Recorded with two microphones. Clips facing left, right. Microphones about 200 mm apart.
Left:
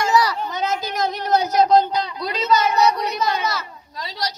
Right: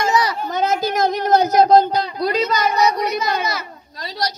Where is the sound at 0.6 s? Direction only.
50° right (ahead or behind).